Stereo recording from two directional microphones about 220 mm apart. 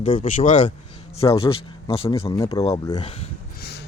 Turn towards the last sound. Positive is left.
turn(degrees=50)  # may be behind; listen again after turning